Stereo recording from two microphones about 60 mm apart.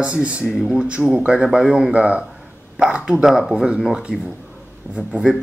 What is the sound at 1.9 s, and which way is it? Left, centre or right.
Speech, right.